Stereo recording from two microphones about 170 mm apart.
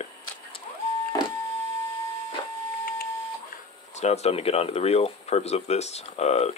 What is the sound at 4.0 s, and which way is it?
Speech, 40° left (ahead or behind).